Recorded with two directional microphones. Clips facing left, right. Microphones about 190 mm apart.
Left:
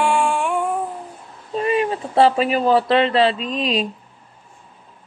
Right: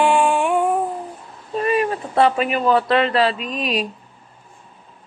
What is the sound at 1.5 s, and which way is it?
Speech, 25° left (ahead or behind).